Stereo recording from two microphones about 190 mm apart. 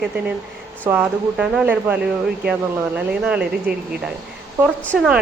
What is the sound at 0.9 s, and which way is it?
Speech, 5° right (ahead or behind).